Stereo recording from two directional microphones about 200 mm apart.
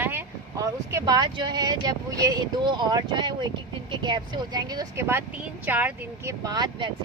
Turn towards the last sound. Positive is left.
turn(degrees=-20)  # may be behind; listen again after turning